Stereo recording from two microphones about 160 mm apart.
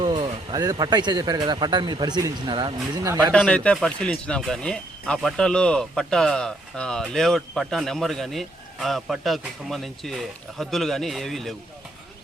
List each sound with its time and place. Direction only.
0.0 s speech: 25° right (ahead or behind)
3.3 s speech: 5° left (ahead or behind)